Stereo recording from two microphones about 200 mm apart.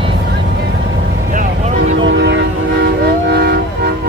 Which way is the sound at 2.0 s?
60° right (ahead or behind).